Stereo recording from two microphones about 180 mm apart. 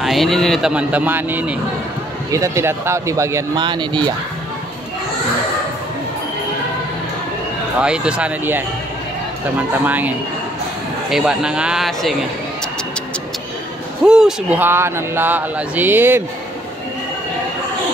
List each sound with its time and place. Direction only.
0.0 s a man's voice: centre (ahead or behind); by 4.1 s 25° right (ahead or behind)
7.8 s a man's voice: 5° right (ahead or behind)
9.8 s a man's voice: 10° right (ahead or behind)
14.0 s speech: 5° right (ahead or behind)